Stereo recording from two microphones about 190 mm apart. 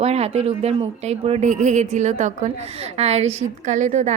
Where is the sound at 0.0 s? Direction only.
35° right (ahead or behind).